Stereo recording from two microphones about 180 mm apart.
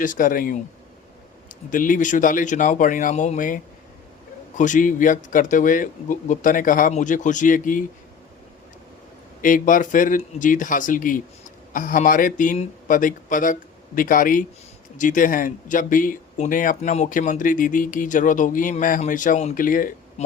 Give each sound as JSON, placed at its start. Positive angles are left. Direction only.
{"t": 0.0, "sound": "speech", "side_deg": 50}
{"t": 1.7, "sound": "speech", "side_deg": 50}
{"t": 9.4, "sound": "speech", "side_deg": 50}